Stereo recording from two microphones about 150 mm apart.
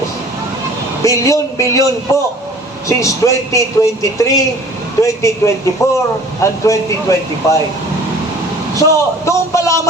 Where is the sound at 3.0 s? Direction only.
20° left (ahead or behind).